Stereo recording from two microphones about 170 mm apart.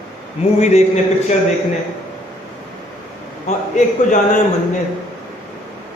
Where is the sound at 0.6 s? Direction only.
40° left (ahead or behind).